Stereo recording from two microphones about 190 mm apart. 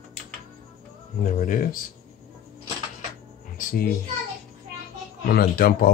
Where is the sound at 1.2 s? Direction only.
45° left (ahead or behind).